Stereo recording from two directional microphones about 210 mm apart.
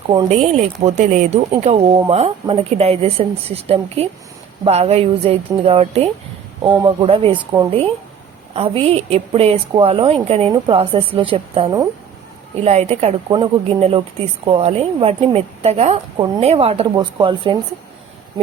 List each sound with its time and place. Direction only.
0.1 s a woman's voice: 20° right (ahead or behind)
0.5 s a woman's voice: 35° right (ahead or behind)